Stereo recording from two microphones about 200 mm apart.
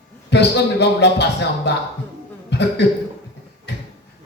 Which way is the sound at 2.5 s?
60° left (ahead or behind).